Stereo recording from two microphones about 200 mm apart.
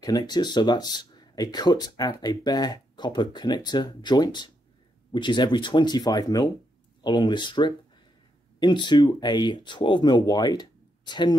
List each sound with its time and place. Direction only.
0.0 s speech: 20° left (ahead or behind)